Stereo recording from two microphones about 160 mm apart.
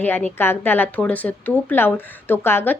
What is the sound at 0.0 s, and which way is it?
A woman's voice, 10° left (ahead or behind).